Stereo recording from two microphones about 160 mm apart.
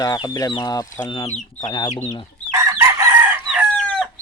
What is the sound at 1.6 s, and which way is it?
Speech, 25° left (ahead or behind).